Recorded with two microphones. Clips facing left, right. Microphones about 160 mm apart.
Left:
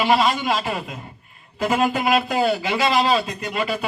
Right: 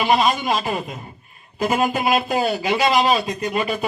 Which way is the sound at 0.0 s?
20° right (ahead or behind).